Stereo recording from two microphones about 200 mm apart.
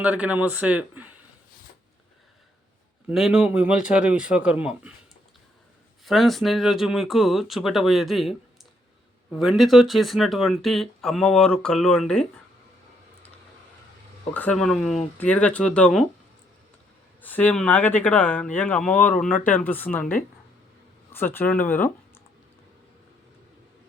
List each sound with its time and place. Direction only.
0.0 s speech: 5° right (ahead or behind)
3.1 s speech: 5° right (ahead or behind)
6.1 s speech: centre (ahead or behind)
9.4 s speech: centre (ahead or behind)
14.3 s speech: 5° left (ahead or behind)
17.2 s speech: 10° left (ahead or behind)